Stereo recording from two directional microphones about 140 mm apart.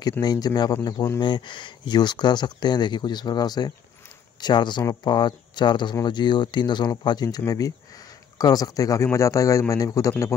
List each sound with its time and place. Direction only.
0.2 s a man's voice: 30° left (ahead or behind)
1.2 s a man's voice: 35° left (ahead or behind)